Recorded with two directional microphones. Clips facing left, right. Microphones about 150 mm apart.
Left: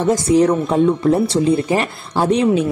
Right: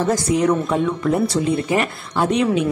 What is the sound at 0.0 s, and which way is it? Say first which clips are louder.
Speech: left 4 dB; 20° left (ahead or behind).